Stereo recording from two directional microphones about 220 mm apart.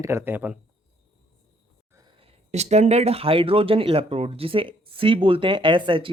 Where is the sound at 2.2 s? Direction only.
30° right (ahead or behind).